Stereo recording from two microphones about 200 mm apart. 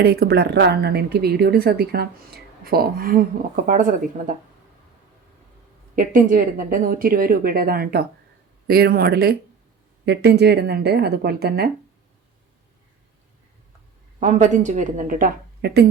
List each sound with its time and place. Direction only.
0.0 s speech: 50° right (ahead or behind)
6.0 s speech: 40° right (ahead or behind)
14.2 s a woman's voice: 35° right (ahead or behind); by 15.9 s 55° right (ahead or behind)